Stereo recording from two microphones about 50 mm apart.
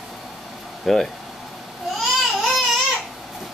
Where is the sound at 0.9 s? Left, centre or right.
Centre.